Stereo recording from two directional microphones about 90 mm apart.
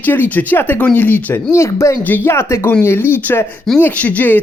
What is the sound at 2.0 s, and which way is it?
Speech, 20° left (ahead or behind).